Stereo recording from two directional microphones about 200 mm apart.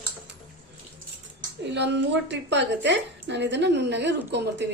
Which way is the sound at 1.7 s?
60° right (ahead or behind).